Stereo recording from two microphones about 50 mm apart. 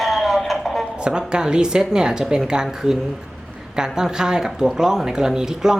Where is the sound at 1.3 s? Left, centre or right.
Centre.